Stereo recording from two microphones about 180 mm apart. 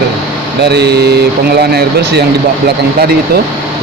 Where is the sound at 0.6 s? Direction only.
65° right (ahead or behind).